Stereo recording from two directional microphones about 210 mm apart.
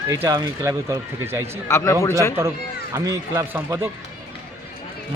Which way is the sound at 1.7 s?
15° left (ahead or behind).